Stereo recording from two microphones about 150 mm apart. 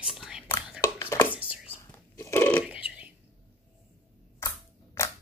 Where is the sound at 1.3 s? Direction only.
10° right (ahead or behind).